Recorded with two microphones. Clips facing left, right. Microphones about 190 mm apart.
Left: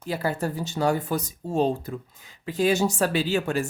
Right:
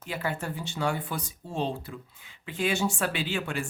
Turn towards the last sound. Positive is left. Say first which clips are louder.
# left 7 dB
turn(degrees=40)  # may be behind; listen again after turning